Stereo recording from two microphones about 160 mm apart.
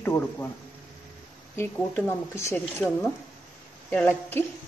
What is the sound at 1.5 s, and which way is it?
Speech, 15° left (ahead or behind).